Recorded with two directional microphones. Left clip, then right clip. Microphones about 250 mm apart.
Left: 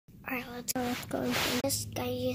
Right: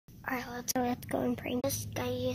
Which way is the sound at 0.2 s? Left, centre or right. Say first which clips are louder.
Right 1 dB; centre.